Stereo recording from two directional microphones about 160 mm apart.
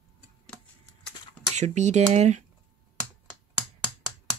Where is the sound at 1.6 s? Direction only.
45° right (ahead or behind).